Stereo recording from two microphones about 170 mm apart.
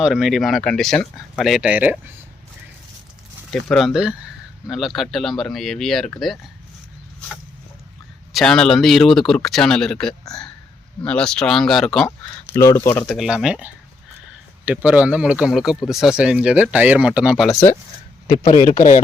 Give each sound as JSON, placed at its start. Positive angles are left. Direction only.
{"t": 0.0, "sound": "speech", "side_deg": 0}
{"t": 3.5, "sound": "speech", "side_deg": 0}
{"t": 8.3, "sound": "speech", "side_deg": 0}
{"t": 12.5, "sound": "speech", "side_deg": 15}
{"t": 14.8, "sound": "speech", "side_deg": -10}
{"t": 18.3, "sound": "a man's voice", "side_deg": 40}